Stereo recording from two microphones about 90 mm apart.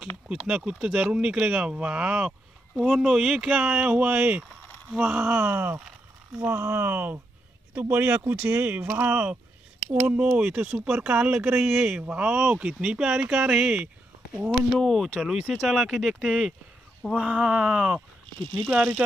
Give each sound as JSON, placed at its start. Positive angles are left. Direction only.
{"t": 0.3, "sound": "speech", "side_deg": -10}
{"t": 14.8, "sound": "speech", "side_deg": 0}